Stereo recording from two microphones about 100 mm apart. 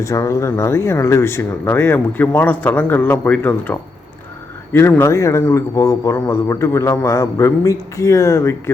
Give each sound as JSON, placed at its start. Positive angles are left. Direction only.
{"t": 0.0, "sound": "speech", "side_deg": 30}